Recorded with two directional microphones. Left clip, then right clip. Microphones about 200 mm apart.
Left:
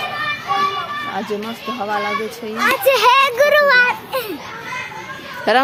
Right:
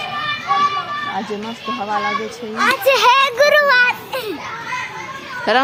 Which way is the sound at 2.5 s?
15° right (ahead or behind).